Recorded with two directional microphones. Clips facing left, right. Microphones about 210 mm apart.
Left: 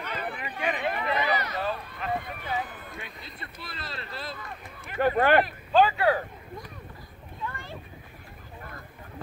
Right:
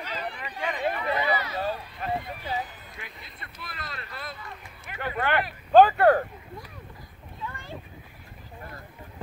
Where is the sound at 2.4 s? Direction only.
55° left (ahead or behind).